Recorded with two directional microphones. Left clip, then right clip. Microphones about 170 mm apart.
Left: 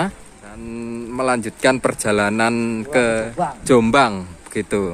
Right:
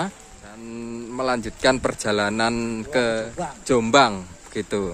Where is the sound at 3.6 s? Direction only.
15° left (ahead or behind).